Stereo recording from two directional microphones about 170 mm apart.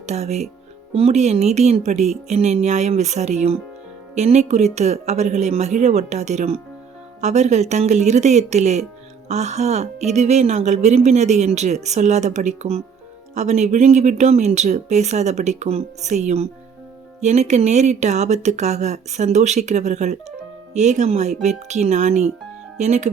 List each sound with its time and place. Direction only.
0.0 s a woman's voice: 40° right (ahead or behind)